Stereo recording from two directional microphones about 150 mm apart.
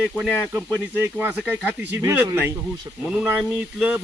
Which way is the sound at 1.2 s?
10° right (ahead or behind).